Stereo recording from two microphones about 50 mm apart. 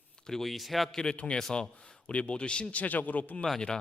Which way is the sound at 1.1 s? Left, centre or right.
Left.